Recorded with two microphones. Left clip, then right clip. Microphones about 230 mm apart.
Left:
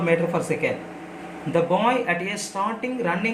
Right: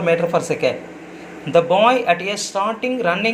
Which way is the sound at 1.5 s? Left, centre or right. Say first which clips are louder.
Right 7 dB; centre.